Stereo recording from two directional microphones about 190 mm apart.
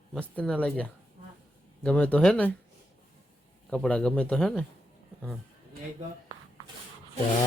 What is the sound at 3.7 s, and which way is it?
Speech, 5° left (ahead or behind).